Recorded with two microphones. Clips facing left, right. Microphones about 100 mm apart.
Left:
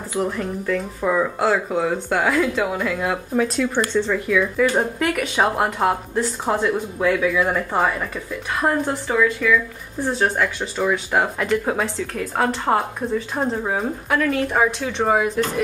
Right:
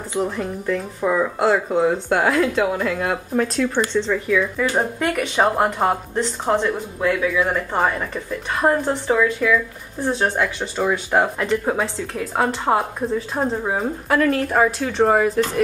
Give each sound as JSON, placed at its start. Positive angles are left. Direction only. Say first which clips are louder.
{"t": 0.1, "sound": "speech", "louder": "even", "side_deg": 0}